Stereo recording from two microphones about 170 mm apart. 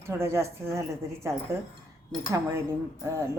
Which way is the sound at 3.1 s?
15° right (ahead or behind).